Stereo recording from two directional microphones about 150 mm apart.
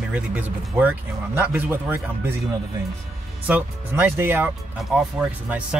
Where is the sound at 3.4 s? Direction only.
10° right (ahead or behind).